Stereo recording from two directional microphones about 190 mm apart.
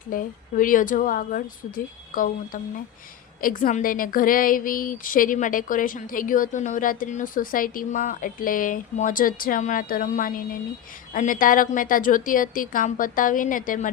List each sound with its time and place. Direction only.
0.1 s speech: 45° left (ahead or behind)